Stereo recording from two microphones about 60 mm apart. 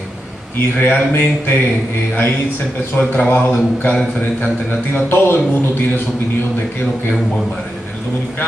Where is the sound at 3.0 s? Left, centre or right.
Left.